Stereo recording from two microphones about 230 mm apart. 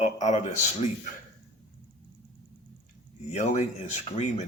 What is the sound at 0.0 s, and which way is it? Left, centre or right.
Speech, left.